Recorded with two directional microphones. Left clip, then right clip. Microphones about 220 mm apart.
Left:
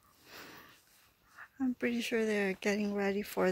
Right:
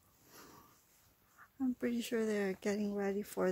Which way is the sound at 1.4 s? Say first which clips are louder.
Left 3 dB; 15° left (ahead or behind).